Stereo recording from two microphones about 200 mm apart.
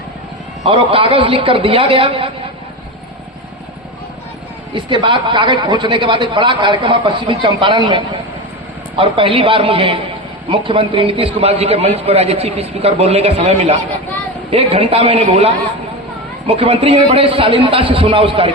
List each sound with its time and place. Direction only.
0.6 s a man's voice: 25° right (ahead or behind)
4.7 s a man's voice: 25° right (ahead or behind)